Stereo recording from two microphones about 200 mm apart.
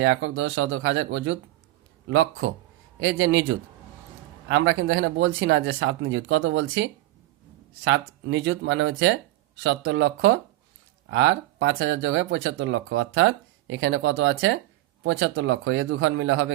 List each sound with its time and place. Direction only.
0.0 s speech: 70° right (ahead or behind)
4.4 s speech: 70° right (ahead or behind)
11.1 s speech: 75° right (ahead or behind)